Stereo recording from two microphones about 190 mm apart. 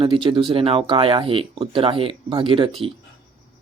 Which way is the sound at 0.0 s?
25° right (ahead or behind).